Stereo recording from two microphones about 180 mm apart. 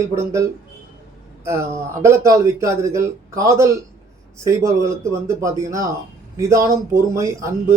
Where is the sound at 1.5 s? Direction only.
15° right (ahead or behind).